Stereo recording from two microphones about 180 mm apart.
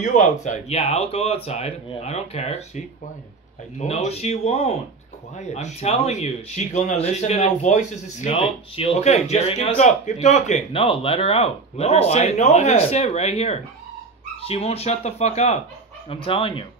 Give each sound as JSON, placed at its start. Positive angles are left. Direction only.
{"t": 0.0, "sound": "speech", "side_deg": 40}
{"t": 3.8, "sound": "speech", "side_deg": 35}